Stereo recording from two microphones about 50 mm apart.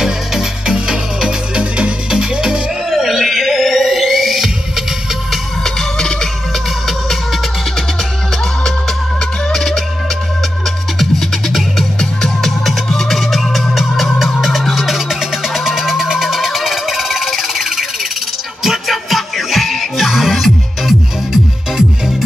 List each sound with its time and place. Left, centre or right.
0.0 s music: centre
2.9 s music: centre
5.6 s music: centre
9.5 s music: centre
11.0 s music: centre